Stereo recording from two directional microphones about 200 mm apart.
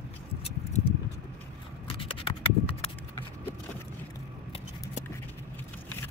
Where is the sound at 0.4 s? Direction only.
30° left (ahead or behind).